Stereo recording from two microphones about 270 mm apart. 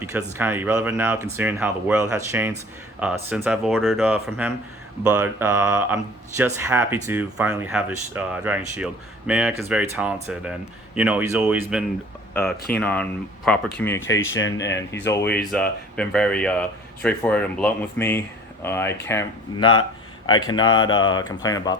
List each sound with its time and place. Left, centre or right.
0.0 s speech: centre
14.1 s speech: left
14.7 s speech: centre